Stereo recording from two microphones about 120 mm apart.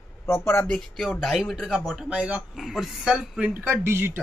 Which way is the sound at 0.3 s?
15° left (ahead or behind).